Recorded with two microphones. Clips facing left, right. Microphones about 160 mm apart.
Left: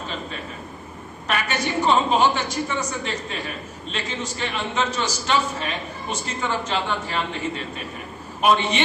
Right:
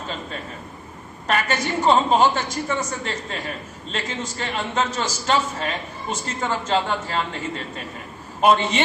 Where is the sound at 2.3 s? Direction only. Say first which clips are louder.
Even; 40° right (ahead or behind).